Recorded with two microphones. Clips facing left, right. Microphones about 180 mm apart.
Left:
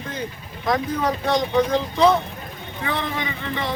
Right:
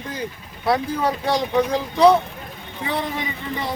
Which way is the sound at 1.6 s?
10° right (ahead or behind).